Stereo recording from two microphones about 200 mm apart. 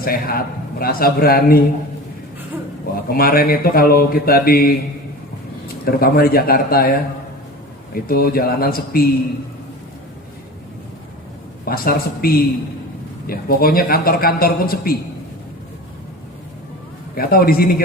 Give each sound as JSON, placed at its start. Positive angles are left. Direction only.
{"t": 0.0, "sound": "a man's voice", "side_deg": 45}
{"t": 2.9, "sound": "a man's voice", "side_deg": 50}
{"t": 5.8, "sound": "a man's voice", "side_deg": 50}
{"t": 7.9, "sound": "a man's voice", "side_deg": 50}
{"t": 11.6, "sound": "a man's voice", "side_deg": 45}
{"t": 17.2, "sound": "a man's voice", "side_deg": 50}